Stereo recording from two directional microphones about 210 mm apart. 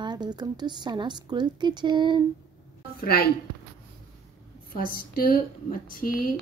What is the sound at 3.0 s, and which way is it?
Speech, 45° left (ahead or behind).